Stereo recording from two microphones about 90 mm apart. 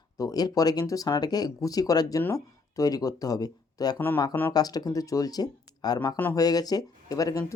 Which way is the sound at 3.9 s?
20° left (ahead or behind).